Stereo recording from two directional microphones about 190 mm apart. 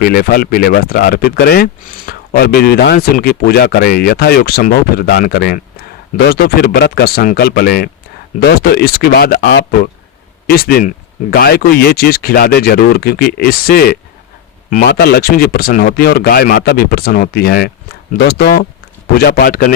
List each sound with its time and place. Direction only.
0.0 s speech: 50° left (ahead or behind)